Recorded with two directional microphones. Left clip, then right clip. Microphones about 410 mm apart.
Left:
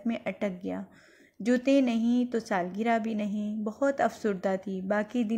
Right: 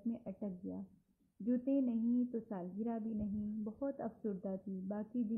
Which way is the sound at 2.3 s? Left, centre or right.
Left.